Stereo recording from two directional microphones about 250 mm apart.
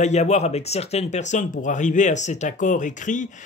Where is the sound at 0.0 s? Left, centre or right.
Left.